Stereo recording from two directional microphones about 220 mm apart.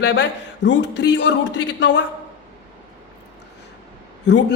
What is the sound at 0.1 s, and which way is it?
A man's voice, 50° left (ahead or behind).